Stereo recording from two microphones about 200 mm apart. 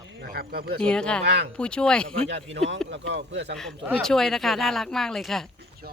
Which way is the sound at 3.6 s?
Centre (ahead or behind).